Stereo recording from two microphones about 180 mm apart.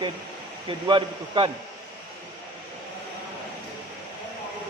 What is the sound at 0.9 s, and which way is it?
Speech, 25° right (ahead or behind).